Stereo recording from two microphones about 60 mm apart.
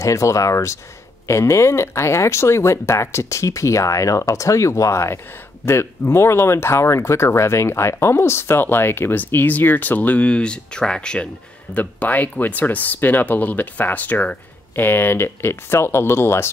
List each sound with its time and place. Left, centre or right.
0.0 s speech: left; by 11.2 s centre
11.7 s speech: left
14.8 s speech: left